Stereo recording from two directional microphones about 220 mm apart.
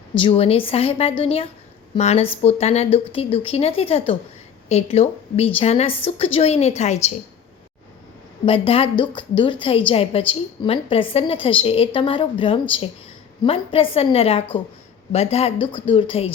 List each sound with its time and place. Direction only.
0.2 s a woman's voice: 25° left (ahead or behind)
8.4 s a woman's voice: 25° left (ahead or behind)